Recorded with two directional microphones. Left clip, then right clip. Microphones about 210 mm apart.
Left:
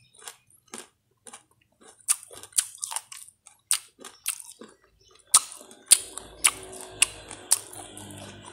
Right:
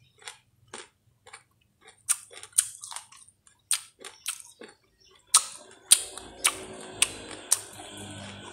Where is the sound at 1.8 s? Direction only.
20° left (ahead or behind).